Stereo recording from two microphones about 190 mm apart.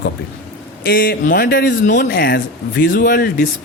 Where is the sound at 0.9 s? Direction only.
50° left (ahead or behind).